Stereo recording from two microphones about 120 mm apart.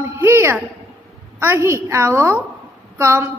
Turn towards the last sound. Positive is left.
turn(degrees=-25)  # may be behind; listen again after turning